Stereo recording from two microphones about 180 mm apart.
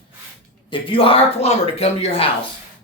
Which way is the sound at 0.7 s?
30° left (ahead or behind).